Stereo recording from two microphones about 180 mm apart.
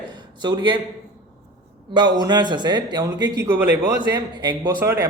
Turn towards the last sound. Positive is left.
turn(degrees=-15)  # may be behind; listen again after turning